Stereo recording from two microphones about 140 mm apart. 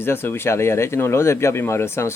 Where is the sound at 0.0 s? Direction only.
15° left (ahead or behind).